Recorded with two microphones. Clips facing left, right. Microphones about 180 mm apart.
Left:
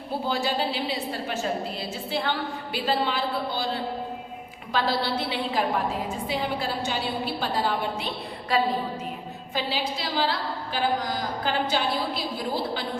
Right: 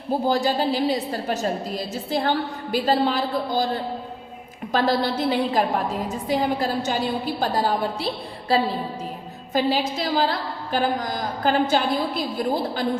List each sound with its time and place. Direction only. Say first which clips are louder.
0.1 s a woman's voice: right 6 dB; 40° right (ahead or behind)
9.5 s a woman's voice: right 7 dB; 45° right (ahead or behind)